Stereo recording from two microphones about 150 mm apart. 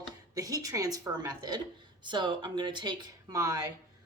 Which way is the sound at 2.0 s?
30° right (ahead or behind).